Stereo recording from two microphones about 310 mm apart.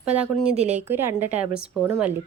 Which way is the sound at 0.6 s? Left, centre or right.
Right.